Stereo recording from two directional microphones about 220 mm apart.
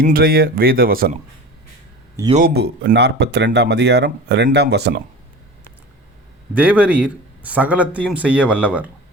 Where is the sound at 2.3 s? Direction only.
35° right (ahead or behind).